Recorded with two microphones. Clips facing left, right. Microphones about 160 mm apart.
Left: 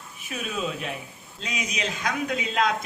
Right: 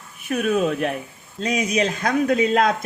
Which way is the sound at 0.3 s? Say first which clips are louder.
Right 10 dB; 55° right (ahead or behind).